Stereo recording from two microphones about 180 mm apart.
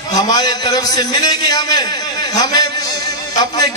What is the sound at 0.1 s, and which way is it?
A man's voice, 20° left (ahead or behind).